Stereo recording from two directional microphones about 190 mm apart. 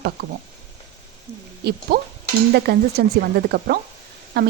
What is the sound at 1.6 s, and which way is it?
A woman's voice, 55° right (ahead or behind).